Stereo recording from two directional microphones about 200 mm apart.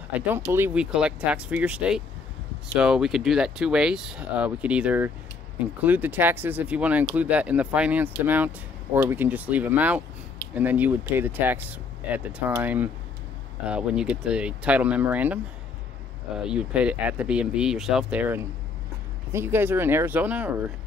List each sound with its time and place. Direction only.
0.1 s speech: 10° right (ahead or behind)
16.4 s speech: 5° right (ahead or behind)